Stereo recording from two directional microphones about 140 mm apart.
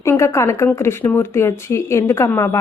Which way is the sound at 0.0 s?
20° left (ahead or behind).